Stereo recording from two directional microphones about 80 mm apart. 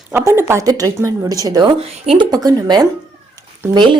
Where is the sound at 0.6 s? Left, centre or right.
Right.